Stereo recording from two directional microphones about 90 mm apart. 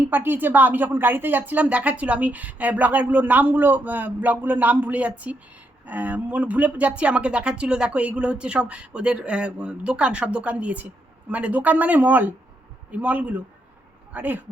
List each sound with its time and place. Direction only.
0.1 s a woman's voice: 20° right (ahead or behind)